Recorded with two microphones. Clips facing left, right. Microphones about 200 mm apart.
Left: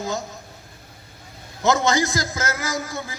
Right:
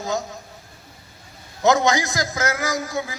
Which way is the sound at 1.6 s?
15° right (ahead or behind).